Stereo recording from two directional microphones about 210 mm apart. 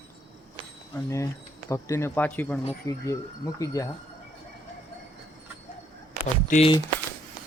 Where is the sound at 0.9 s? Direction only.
15° left (ahead or behind).